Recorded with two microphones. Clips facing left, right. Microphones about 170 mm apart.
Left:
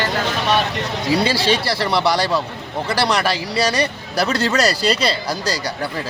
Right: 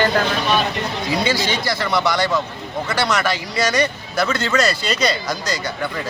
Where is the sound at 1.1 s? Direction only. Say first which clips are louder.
Left 3 dB; 30° left (ahead or behind).